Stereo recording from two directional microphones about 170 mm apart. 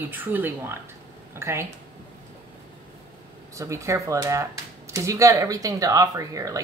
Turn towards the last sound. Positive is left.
turn(degrees=-20)  # may be behind; listen again after turning